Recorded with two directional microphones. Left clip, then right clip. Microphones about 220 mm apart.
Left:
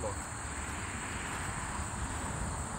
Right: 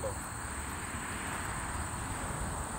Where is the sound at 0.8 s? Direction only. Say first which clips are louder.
Even; 25° left (ahead or behind).